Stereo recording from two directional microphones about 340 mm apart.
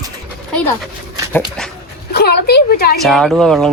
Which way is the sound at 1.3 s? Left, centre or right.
Centre.